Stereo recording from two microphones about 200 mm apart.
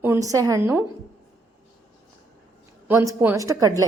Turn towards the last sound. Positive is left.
turn(degrees=-15)  # may be behind; listen again after turning